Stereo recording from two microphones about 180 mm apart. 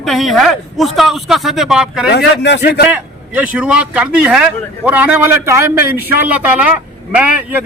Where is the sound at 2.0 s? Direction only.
70° left (ahead or behind).